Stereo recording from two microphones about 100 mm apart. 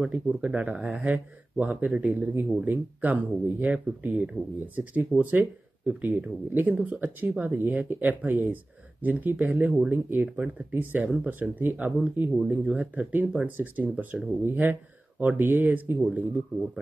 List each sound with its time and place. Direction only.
0.0 s speech: 10° right (ahead or behind)